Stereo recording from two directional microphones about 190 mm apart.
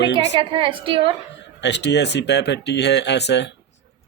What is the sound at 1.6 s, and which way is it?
Speech, 65° left (ahead or behind).